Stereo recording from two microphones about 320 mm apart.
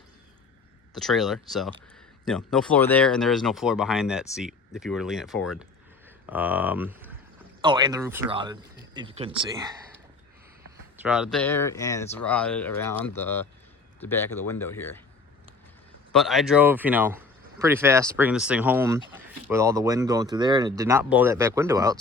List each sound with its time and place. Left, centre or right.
0.9 s speech: centre
16.1 s speech: centre